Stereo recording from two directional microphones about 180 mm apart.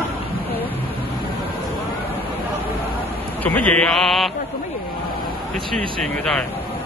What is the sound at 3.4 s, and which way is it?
Mantra, 10° left (ahead or behind).